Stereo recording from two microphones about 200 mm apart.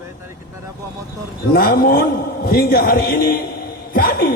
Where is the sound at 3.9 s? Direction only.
45° left (ahead or behind).